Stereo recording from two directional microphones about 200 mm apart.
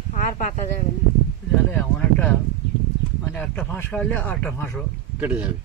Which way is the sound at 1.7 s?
5° left (ahead or behind).